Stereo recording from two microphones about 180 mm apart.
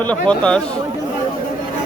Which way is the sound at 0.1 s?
5° left (ahead or behind).